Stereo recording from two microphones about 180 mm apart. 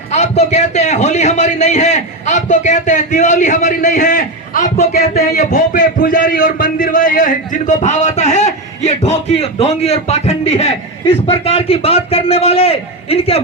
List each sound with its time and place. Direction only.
0.1 s a man's voice: 40° left (ahead or behind)
5.1 s speech: 60° left (ahead or behind)
5.5 s a man's voice: 45° left (ahead or behind)